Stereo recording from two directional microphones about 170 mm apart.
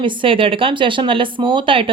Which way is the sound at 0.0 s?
30° right (ahead or behind).